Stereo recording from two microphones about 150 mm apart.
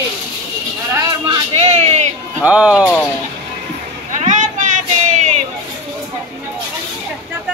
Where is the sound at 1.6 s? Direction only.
45° right (ahead or behind).